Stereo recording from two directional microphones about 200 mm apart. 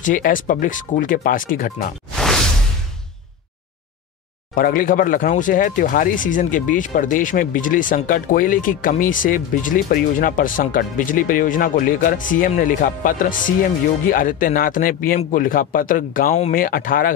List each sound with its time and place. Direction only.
0.0 s speech: 40° left (ahead or behind)
2.1 s whoosh: centre (ahead or behind)
4.6 s speech: 45° left (ahead or behind)